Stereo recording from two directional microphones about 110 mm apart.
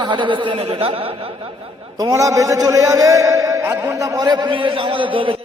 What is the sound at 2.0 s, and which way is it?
A man's voice, 30° right (ahead or behind).